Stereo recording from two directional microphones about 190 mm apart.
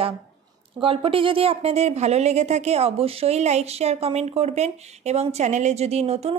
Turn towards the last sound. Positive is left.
turn(degrees=-35)  # may be behind; listen again after turning